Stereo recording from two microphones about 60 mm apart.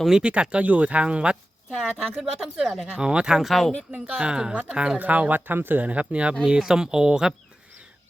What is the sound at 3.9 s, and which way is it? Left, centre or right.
Speech, right.